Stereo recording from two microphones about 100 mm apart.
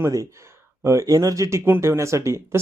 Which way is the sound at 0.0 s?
35° right (ahead or behind).